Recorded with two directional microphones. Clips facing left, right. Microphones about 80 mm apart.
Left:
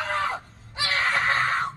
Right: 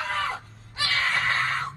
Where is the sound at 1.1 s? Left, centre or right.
Left.